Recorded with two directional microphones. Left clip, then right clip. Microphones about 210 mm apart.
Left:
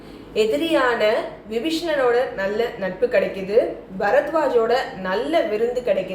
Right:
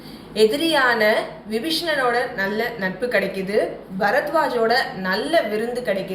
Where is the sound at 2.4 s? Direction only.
5° left (ahead or behind).